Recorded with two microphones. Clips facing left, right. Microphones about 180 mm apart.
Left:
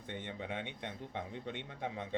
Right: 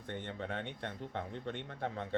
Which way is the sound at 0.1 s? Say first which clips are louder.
Right 1 dB; 15° left (ahead or behind).